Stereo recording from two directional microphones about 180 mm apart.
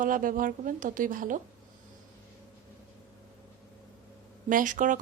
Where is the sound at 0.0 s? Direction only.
50° right (ahead or behind).